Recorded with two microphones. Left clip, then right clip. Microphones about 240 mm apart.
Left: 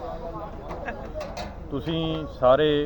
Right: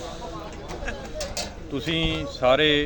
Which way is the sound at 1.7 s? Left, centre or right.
Right.